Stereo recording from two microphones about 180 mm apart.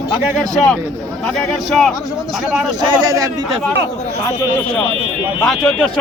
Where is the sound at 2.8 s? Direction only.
20° right (ahead or behind).